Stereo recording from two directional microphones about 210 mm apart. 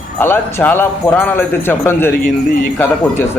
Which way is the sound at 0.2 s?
10° left (ahead or behind).